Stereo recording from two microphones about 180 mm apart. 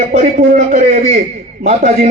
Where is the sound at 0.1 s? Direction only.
40° right (ahead or behind).